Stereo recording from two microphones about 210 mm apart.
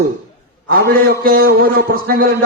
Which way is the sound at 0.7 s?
45° right (ahead or behind).